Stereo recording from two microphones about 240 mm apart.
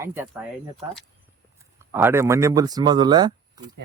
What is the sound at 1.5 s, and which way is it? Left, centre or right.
Speech, centre.